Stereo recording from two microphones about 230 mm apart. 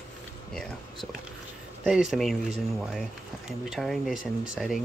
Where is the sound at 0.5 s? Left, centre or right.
Centre.